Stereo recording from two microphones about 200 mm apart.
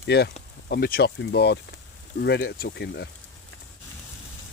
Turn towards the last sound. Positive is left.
turn(degrees=55)  # may be behind; listen again after turning